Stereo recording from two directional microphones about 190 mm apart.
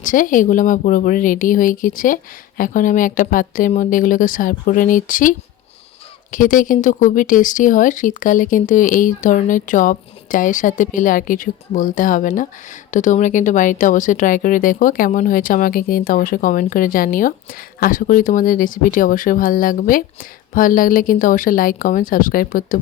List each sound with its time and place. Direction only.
0.0 s speech: 45° left (ahead or behind)
6.3 s speech: 45° left (ahead or behind)